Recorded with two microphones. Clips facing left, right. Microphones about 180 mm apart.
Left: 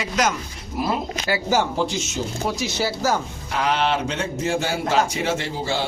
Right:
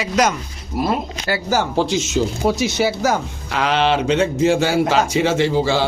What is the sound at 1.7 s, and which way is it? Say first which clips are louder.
Speech: right 5 dB; 90° right.